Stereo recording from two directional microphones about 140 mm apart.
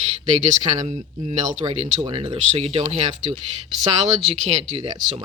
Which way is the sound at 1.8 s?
40° right (ahead or behind).